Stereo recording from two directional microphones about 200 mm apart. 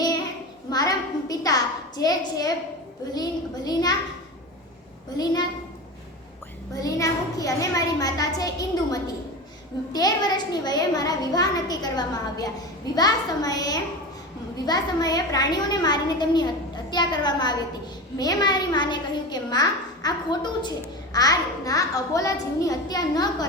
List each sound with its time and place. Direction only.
0.7 s a sound: 20° left (ahead or behind)
3.2 s a child's voice: 20° left (ahead or behind)
5.1 s a child's voice: 20° left (ahead or behind)
6.7 s a child's voice: 15° left (ahead or behind)